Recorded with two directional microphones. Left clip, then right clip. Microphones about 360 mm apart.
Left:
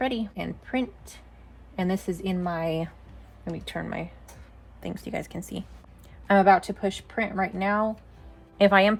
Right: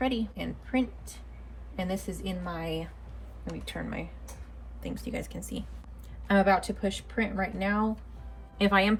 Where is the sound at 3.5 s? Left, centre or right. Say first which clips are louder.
Left 4 dB; left.